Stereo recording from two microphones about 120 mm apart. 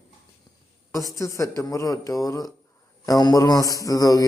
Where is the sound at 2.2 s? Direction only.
30° left (ahead or behind).